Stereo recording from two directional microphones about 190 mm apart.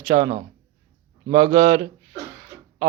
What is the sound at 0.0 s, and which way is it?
Speech, 20° right (ahead or behind).